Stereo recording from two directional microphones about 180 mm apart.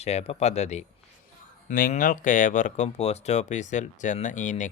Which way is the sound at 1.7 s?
50° left (ahead or behind).